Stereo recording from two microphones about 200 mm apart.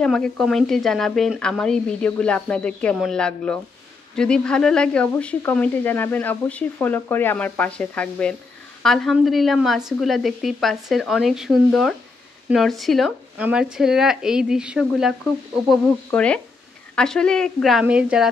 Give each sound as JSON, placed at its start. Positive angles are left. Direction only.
{"t": 0.0, "sound": "a woman's voice", "side_deg": 0}